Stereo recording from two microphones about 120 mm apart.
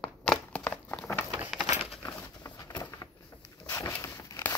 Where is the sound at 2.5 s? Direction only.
30° left (ahead or behind).